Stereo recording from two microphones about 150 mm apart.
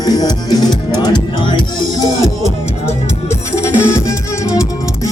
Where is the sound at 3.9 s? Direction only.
20° left (ahead or behind).